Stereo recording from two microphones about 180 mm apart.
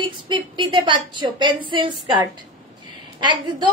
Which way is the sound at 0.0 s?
25° right (ahead or behind).